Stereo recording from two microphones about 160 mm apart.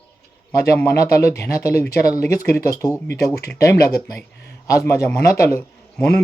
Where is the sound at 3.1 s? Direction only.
90° left.